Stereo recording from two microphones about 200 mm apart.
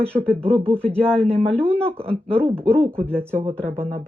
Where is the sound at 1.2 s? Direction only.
5° left (ahead or behind).